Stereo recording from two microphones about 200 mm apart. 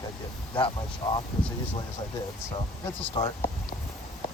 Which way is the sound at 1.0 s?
25° left (ahead or behind).